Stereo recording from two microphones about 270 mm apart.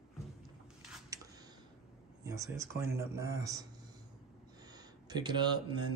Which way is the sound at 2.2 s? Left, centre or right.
Centre.